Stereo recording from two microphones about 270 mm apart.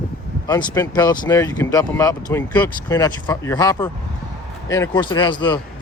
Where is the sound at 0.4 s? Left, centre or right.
Centre.